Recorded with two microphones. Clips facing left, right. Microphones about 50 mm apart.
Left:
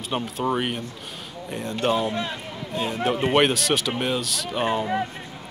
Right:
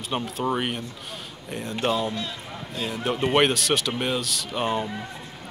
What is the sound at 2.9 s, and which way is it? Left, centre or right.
Speech, centre.